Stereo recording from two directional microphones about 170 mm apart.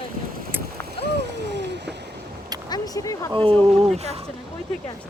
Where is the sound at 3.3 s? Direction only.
30° right (ahead or behind).